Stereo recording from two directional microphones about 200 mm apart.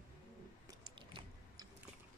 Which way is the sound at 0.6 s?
20° right (ahead or behind).